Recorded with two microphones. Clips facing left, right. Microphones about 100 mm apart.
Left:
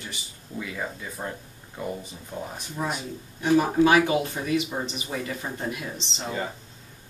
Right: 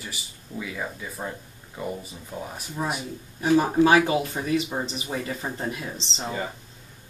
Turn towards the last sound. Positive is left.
turn(degrees=0)  # may be behind; listen again after turning